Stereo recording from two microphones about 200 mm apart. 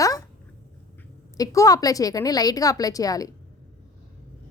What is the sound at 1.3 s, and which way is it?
Speech, 15° left (ahead or behind).